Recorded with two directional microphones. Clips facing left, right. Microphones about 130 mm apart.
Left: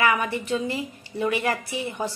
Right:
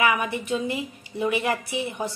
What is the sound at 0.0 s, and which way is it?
A woman's voice, 15° right (ahead or behind).